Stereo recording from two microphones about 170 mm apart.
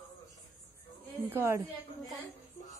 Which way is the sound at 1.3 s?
15° right (ahead or behind).